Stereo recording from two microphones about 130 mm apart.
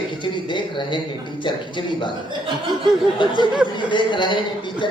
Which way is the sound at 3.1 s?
35° left (ahead or behind).